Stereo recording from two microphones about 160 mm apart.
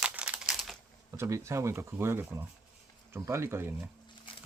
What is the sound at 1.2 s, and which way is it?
Speech, 20° right (ahead or behind).